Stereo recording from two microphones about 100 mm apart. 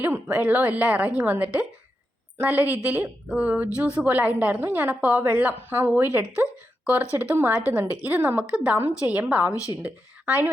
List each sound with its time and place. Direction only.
0.0 s a woman's voice: 15° right (ahead or behind)